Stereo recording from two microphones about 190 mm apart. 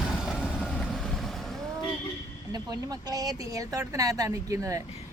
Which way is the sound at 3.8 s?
20° right (ahead or behind).